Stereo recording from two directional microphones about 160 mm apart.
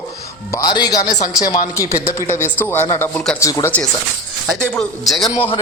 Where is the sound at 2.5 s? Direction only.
15° left (ahead or behind).